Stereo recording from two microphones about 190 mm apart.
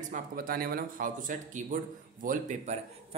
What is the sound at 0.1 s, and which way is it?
Speech, 50° right (ahead or behind).